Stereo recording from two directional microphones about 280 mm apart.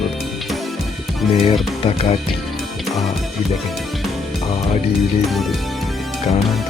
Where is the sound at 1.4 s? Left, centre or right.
Left.